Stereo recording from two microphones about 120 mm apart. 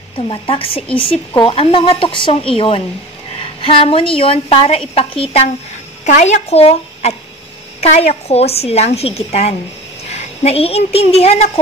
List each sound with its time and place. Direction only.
0.3 s a woman's voice: 50° left (ahead or behind)
6.0 s a woman's voice: 85° left; by 11.5 s 60° left (ahead or behind)